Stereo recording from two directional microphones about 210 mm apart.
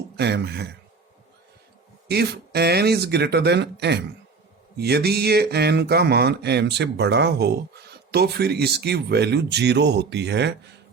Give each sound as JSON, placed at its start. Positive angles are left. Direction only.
{"t": 0.2, "sound": "speech", "side_deg": -55}
{"t": 2.0, "sound": "speech", "side_deg": -50}